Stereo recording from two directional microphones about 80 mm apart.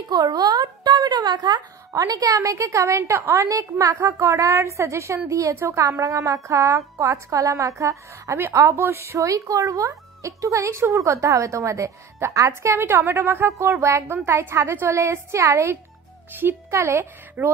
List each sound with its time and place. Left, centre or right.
0.1 s speech: right
3.5 s a woman's voice: right